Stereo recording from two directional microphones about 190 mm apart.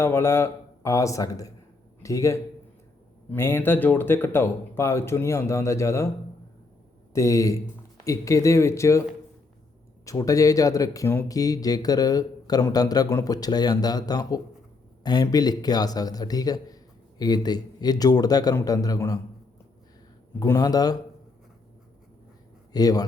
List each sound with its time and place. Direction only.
0.0 s a man's voice: 15° left (ahead or behind)
7.1 s speech: 15° left (ahead or behind)
10.1 s speech: 15° left (ahead or behind)
20.4 s speech: 20° left (ahead or behind)
22.7 s speech: 20° left (ahead or behind)